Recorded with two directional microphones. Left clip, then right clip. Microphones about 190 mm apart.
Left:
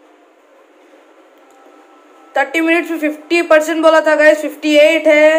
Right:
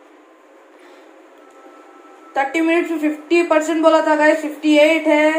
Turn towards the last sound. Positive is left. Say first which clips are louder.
# left 5 dB
turn(degrees=45)  # may be behind; listen again after turning